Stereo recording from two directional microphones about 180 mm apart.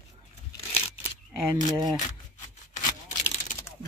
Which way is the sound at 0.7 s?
35° left (ahead or behind).